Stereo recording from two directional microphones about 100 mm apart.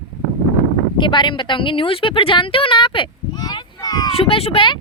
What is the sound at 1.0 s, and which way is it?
A woman's voice, 55° left (ahead or behind).